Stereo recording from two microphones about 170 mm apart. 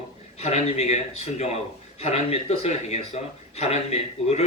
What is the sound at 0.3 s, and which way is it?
A man's voice, 40° left (ahead or behind).